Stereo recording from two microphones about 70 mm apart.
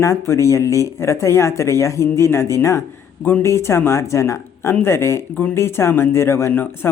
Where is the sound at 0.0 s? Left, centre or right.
Left.